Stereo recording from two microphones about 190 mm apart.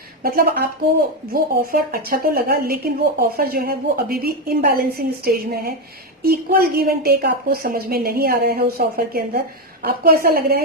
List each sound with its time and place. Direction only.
0.2 s a woman's voice: 50° right (ahead or behind)